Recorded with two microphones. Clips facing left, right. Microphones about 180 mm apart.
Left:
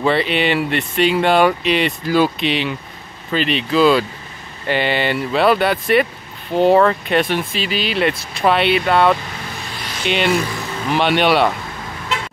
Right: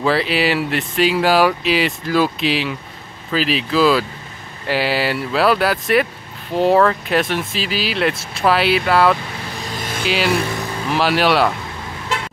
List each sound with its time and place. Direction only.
0.0 s speech: centre (ahead or behind)